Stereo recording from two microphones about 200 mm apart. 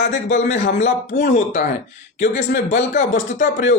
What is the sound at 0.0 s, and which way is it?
Speech, 60° left (ahead or behind).